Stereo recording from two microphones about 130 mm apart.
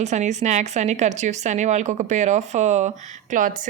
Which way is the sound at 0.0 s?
65° right (ahead or behind).